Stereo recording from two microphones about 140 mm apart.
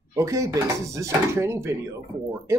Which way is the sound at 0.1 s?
20° right (ahead or behind).